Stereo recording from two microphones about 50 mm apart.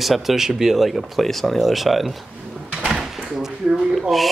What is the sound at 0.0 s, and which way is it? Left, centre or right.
Speech, centre.